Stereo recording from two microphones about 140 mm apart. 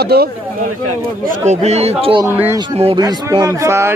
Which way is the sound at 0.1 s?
90° right.